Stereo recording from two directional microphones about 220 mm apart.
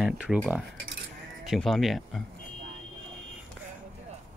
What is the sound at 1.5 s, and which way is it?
Speech, centre (ahead or behind).